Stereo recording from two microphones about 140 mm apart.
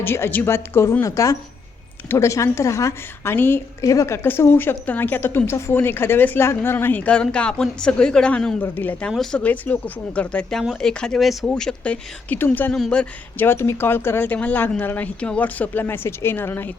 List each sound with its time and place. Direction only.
0.0 s a woman's voice: 15° left (ahead or behind)